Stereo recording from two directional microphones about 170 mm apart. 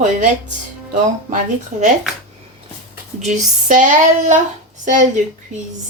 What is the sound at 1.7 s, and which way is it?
Speech, 45° right (ahead or behind).